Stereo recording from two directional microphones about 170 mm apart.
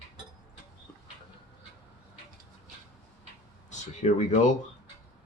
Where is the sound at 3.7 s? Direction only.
45° left (ahead or behind).